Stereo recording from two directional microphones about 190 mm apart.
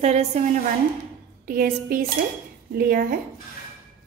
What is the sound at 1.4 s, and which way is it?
A woman's voice, 45° right (ahead or behind).